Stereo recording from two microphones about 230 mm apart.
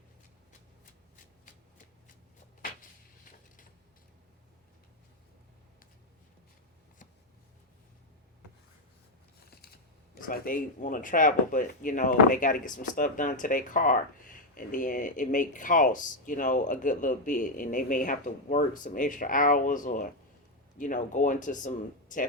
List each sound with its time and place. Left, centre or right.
10.2 s speech: left